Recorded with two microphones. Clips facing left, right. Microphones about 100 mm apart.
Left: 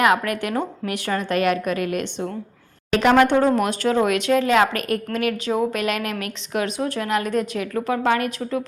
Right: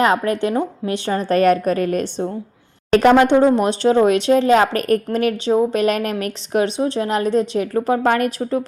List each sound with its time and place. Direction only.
0.0 s a woman's voice: 30° right (ahead or behind)
2.9 s a sound: 40° right (ahead or behind)
3.2 s a woman's voice: 20° right (ahead or behind); by 8.6 s 35° right (ahead or behind)